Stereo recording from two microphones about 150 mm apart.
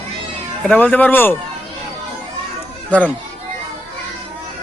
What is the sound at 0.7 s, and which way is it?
Speech, 10° left (ahead or behind).